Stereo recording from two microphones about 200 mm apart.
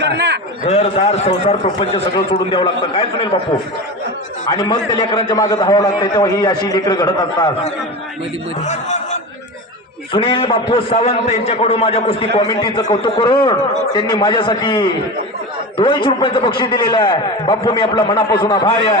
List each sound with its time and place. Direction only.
0.0 s a man's voice: 60° right (ahead or behind)
0.6 s a man's voice: 30° left (ahead or behind)
4.4 s a man's voice: 20° left (ahead or behind)
8.6 s a man's voice: 35° left (ahead or behind)
10.1 s a man's voice: 25° left (ahead or behind)